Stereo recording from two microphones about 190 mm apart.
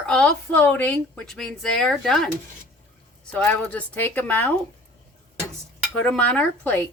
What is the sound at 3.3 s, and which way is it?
Speech, 5° left (ahead or behind).